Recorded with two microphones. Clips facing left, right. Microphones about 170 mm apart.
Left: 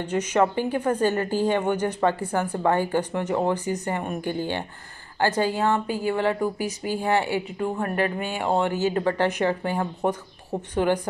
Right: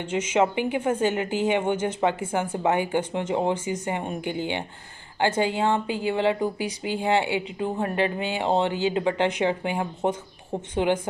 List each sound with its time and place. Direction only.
0.0 s speech: 25° right (ahead or behind)